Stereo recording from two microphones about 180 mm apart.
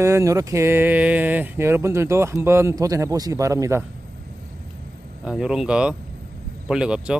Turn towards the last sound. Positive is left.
turn(degrees=-5)  # may be behind; listen again after turning